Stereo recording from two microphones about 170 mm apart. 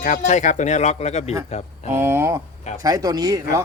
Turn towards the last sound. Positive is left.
turn(degrees=-20)  # may be behind; listen again after turning